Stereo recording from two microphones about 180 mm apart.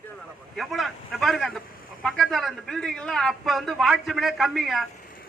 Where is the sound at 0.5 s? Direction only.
Centre (ahead or behind).